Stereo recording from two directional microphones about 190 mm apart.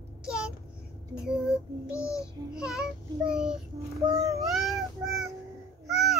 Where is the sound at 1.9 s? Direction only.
15° left (ahead or behind).